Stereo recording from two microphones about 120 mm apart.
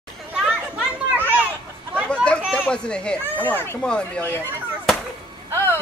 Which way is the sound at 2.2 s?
10° left (ahead or behind).